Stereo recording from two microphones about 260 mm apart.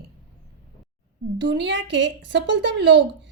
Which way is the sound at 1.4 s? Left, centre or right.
Right.